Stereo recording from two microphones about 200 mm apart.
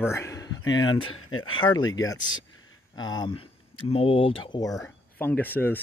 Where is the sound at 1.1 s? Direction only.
90° left.